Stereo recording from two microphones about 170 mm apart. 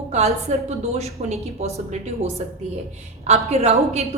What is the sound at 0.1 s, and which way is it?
A woman's voice, 40° right (ahead or behind).